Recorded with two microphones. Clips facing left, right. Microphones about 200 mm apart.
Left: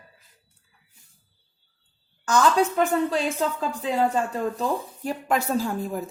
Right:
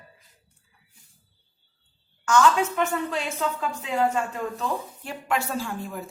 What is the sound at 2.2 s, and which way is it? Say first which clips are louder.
Speech: even; 35° left (ahead or behind).